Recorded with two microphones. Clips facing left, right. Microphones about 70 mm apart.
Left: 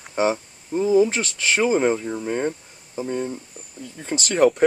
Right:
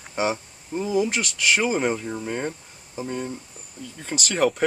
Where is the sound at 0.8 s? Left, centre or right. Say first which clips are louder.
Left 6 dB; left.